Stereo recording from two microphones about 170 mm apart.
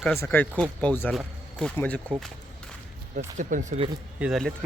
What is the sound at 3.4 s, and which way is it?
Speech, 50° right (ahead or behind).